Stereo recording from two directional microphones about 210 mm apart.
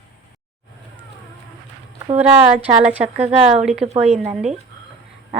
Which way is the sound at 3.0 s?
30° right (ahead or behind).